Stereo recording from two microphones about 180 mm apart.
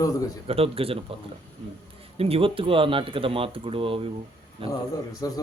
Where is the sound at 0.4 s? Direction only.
30° right (ahead or behind).